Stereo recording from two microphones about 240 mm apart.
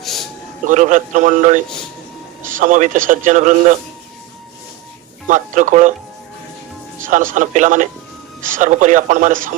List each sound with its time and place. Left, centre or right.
0.0 s a sound: centre
0.7 s a man's voice: right
5.3 s a man's voice: right
7.1 s a man's voice: right